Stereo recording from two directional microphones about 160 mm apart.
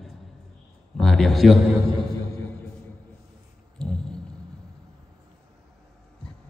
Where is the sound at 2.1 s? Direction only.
15° left (ahead or behind).